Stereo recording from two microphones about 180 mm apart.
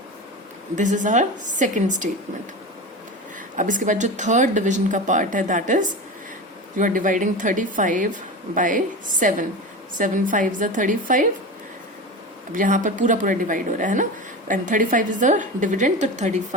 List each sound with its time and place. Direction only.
0.8 s a woman's voice: 45° right (ahead or behind)
3.5 s a woman's voice: 45° right (ahead or behind)
12.5 s a woman's voice: 45° right (ahead or behind)